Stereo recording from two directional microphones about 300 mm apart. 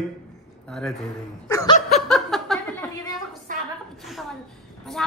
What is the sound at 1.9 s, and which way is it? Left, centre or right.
Snicker, centre.